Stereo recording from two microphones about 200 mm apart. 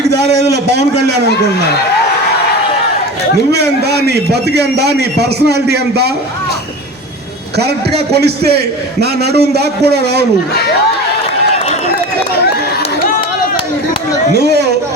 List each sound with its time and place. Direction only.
0.1 s a man's voice: 55° right (ahead or behind)
3.5 s a man's voice: 55° right (ahead or behind)
8.1 s a man's voice: 55° right (ahead or behind)
14.3 s a man's voice: 55° right (ahead or behind)